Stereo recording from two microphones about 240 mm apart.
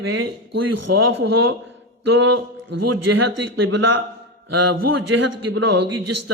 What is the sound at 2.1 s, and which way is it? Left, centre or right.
Speech, right.